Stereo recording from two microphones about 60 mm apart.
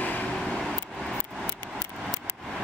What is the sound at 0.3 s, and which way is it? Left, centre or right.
Vehicle, centre.